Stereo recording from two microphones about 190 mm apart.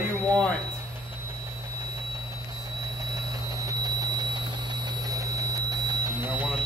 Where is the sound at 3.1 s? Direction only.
20° right (ahead or behind).